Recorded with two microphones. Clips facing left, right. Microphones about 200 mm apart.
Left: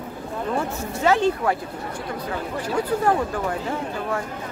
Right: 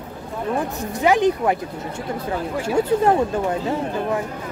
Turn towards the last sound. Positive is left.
turn(degrees=-20)  # may be behind; listen again after turning